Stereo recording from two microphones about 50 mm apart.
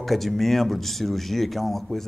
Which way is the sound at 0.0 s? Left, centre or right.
Centre.